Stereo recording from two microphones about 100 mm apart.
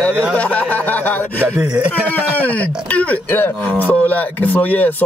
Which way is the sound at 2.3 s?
15° left (ahead or behind).